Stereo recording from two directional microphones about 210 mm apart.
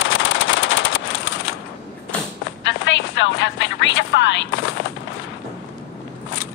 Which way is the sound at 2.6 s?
60° left (ahead or behind).